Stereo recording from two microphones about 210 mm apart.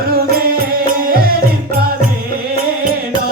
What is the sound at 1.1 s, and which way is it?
Music, 45° right (ahead or behind).